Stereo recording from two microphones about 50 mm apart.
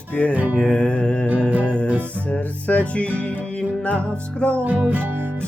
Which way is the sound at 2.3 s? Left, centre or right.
Left.